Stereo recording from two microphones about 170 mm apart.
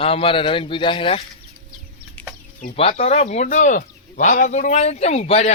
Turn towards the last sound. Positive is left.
turn(degrees=40)  # may be behind; listen again after turning